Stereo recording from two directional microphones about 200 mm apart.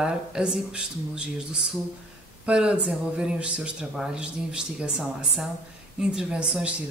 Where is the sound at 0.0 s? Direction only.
5° right (ahead or behind).